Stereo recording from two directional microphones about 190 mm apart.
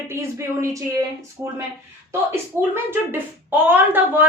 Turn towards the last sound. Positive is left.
turn(degrees=-10)  # may be behind; listen again after turning